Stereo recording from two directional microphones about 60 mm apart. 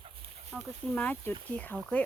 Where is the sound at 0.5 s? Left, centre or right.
Centre.